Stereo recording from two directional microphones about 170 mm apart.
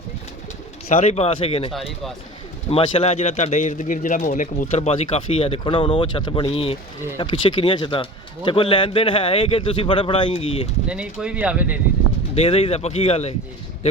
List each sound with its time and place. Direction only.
0.9 s speech: 40° left (ahead or behind)
10.8 s speech: 5° right (ahead or behind)
12.3 s speech: 35° left (ahead or behind)